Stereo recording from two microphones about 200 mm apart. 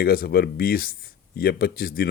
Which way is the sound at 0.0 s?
50° left (ahead or behind).